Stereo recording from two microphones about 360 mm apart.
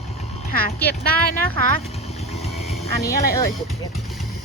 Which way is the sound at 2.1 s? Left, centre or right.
Centre.